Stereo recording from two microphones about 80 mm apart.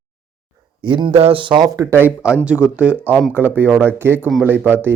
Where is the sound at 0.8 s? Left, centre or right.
Right.